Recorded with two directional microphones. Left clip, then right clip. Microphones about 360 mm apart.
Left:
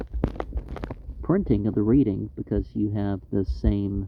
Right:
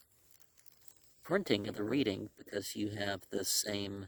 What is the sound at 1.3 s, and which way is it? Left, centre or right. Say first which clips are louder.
Speech: left 7 dB; right.